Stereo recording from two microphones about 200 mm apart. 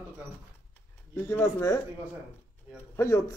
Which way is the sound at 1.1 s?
10° left (ahead or behind).